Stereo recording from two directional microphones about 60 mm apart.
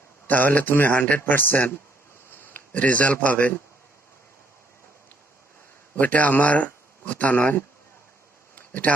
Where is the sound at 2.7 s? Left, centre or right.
Left.